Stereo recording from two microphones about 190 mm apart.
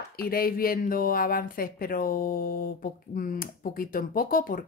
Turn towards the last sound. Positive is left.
turn(degrees=45)  # may be behind; listen again after turning